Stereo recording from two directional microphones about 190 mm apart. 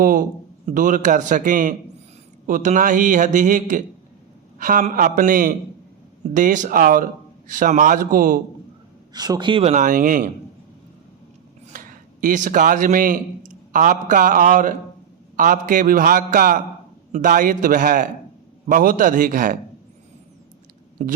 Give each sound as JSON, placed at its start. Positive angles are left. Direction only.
{"t": 0.0, "sound": "a man's voice", "side_deg": -45}
{"t": 9.1, "sound": "a man's voice", "side_deg": -20}
{"t": 11.7, "sound": "speech", "side_deg": -45}
{"t": 21.0, "sound": "a man's voice", "side_deg": -40}